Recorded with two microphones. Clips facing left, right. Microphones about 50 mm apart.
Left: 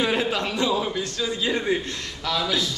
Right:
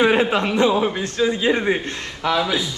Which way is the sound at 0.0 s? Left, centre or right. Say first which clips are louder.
Right 6 dB; right.